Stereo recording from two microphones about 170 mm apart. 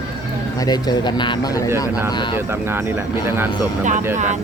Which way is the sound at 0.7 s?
25° left (ahead or behind).